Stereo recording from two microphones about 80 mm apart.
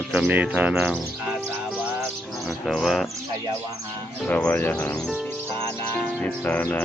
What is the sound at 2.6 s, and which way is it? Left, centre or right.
Speech, centre.